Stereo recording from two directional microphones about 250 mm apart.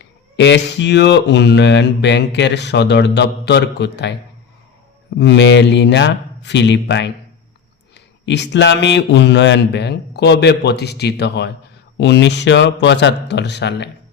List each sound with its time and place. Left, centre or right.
0.0 s speech: left
5.2 s speech: left